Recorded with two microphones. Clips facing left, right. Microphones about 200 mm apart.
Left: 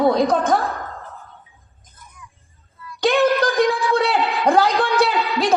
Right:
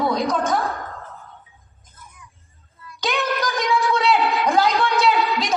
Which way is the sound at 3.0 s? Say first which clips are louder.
Left 7 dB; 55° left (ahead or behind).